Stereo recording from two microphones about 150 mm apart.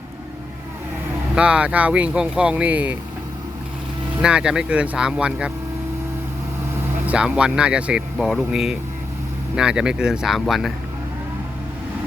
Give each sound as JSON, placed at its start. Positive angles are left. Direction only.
{"t": 1.4, "sound": "speech", "side_deg": -5}
{"t": 4.2, "sound": "speech", "side_deg": -5}
{"t": 7.1, "sound": "speech", "side_deg": -5}